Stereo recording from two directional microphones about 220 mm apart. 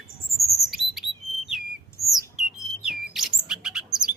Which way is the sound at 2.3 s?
Centre (ahead or behind).